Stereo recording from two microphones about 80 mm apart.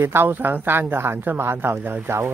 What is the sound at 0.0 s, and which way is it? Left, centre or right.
Speech, right.